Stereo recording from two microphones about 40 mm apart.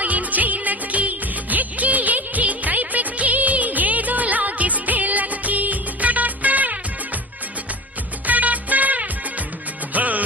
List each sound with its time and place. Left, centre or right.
0.0 s music: right
8.3 s music: right